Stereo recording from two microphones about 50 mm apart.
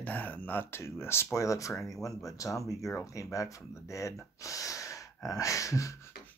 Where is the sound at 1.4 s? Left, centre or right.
Left.